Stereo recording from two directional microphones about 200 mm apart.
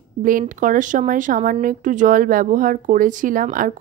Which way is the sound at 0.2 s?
40° right (ahead or behind).